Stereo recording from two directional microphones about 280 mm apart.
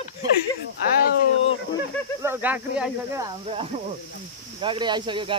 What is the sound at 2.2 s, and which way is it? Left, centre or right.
Speech, centre.